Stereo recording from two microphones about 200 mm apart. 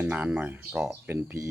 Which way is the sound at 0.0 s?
5° right (ahead or behind).